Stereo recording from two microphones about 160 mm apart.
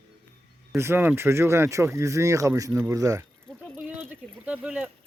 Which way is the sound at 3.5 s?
5° left (ahead or behind).